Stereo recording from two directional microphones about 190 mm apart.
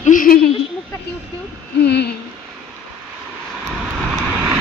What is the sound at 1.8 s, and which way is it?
Speech, 60° left (ahead or behind).